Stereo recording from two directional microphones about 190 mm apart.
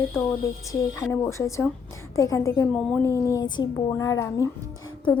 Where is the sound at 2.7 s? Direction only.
5° left (ahead or behind).